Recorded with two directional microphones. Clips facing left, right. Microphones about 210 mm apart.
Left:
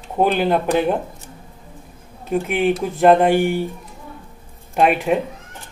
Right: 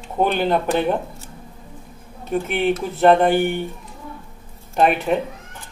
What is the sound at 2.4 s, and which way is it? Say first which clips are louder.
Speech: left 2 dB; centre (ahead or behind).